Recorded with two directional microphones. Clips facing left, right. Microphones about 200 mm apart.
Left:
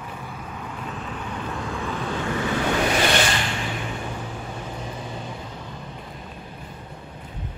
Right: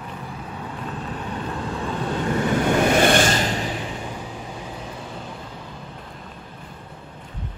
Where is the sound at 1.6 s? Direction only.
35° right (ahead or behind).